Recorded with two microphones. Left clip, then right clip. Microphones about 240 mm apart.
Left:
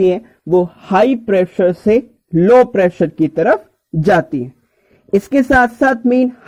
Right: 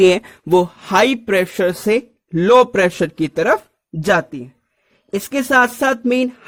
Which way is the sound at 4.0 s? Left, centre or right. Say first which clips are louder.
Left 4 dB; centre.